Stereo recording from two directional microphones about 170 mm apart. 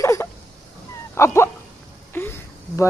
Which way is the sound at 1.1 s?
15° left (ahead or behind).